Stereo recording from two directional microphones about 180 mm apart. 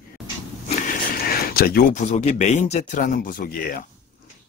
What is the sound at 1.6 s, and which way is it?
Speech, 60° left (ahead or behind).